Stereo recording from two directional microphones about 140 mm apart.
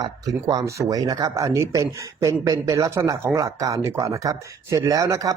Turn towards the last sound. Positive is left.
turn(degrees=-20)  # may be behind; listen again after turning